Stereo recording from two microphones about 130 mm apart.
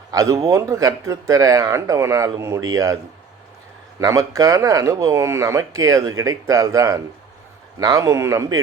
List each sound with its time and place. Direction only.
0.1 s speech: 25° right (ahead or behind)